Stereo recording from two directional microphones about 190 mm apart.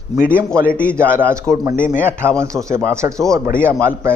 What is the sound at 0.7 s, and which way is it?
Speech, 5° left (ahead or behind).